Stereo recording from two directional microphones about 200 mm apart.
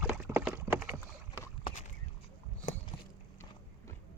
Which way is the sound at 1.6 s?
30° left (ahead or behind).